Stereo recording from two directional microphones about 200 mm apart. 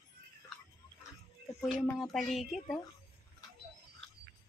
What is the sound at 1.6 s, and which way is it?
Speech, centre (ahead or behind).